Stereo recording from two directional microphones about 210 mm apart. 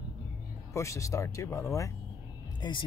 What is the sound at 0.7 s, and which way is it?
Speech, 15° left (ahead or behind).